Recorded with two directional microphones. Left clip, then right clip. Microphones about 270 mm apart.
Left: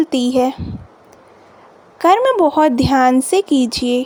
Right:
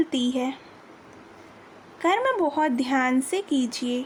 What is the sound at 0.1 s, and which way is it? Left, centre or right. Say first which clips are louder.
Speech: left 11 dB; left.